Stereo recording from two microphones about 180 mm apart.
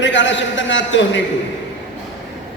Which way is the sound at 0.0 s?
90° left.